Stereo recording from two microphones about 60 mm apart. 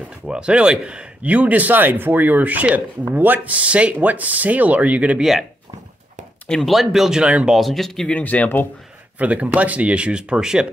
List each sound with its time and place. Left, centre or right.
0.3 s speech: centre
6.6 s speech: centre
7.5 s speech: centre
8.1 s speech: left
9.2 s speech: right